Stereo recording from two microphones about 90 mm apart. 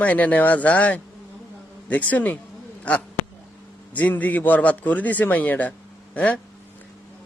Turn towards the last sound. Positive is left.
turn(degrees=15)  # may be behind; listen again after turning